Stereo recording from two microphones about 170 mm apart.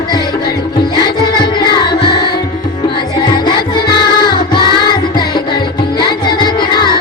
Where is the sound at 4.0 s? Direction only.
25° left (ahead or behind).